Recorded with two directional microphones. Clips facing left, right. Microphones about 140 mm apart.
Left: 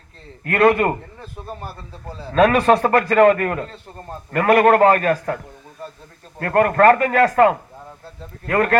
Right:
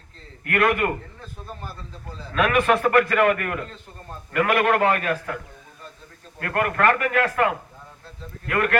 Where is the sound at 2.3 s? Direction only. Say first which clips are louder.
Left 6 dB; 35° left (ahead or behind).